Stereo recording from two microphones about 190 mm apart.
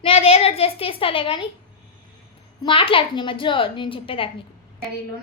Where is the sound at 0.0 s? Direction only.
30° left (ahead or behind).